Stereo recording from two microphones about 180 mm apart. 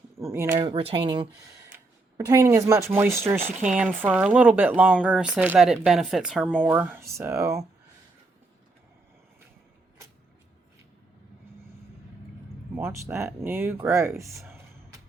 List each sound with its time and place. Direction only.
0.2 s speech: 15° right (ahead or behind)
0.7 s speech: 30° right (ahead or behind)
12.7 s speech: 15° right (ahead or behind)